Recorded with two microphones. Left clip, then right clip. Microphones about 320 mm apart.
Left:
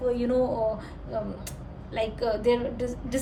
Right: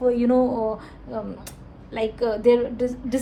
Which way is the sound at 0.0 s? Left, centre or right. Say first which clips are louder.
Right 5 dB; centre.